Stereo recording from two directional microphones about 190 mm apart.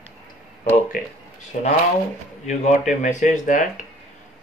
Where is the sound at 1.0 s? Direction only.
50° left (ahead or behind).